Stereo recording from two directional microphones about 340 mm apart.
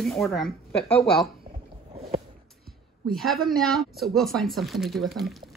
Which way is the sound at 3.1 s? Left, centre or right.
Centre.